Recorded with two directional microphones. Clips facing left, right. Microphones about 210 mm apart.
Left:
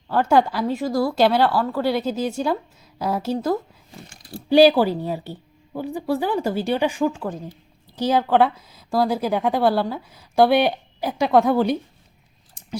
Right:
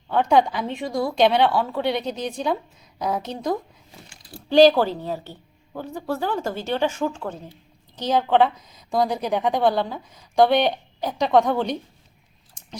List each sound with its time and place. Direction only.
0.1 s speech: 5° left (ahead or behind)
4.0 s a sound: 50° left (ahead or behind)
4.4 s a woman's voice: 10° left (ahead or behind)